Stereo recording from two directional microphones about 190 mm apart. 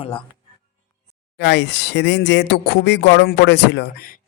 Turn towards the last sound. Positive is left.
turn(degrees=60)  # may be behind; listen again after turning